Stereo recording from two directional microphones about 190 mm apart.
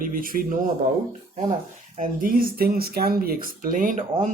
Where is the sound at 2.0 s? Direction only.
50° right (ahead or behind).